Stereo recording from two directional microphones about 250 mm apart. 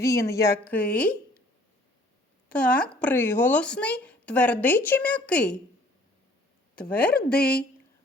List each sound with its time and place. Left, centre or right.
0.0 s a woman's voice: centre
2.5 s speech: centre
6.7 s speech: centre
7.1 s speech: left